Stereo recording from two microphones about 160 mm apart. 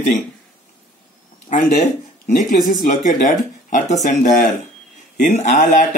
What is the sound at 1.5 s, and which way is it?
Speech, 55° left (ahead or behind).